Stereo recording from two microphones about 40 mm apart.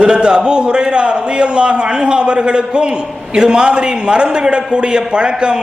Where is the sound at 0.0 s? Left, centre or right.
Right.